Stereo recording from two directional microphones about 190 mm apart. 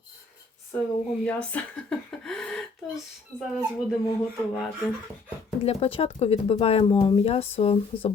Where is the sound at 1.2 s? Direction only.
5° left (ahead or behind).